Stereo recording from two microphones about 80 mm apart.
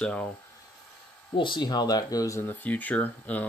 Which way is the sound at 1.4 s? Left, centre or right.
Left.